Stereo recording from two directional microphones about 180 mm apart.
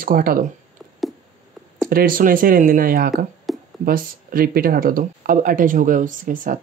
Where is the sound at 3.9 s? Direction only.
55° right (ahead or behind).